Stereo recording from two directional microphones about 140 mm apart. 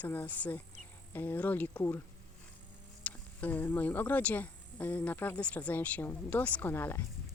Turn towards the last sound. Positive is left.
turn(degrees=15)  # may be behind; listen again after turning